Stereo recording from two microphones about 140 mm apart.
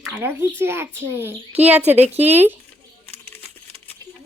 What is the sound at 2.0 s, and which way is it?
Speech, 50° right (ahead or behind).